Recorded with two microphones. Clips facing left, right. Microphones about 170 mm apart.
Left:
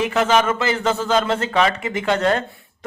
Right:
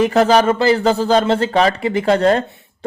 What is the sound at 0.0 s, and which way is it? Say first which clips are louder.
Speech: right 5 dB; 35° right (ahead or behind).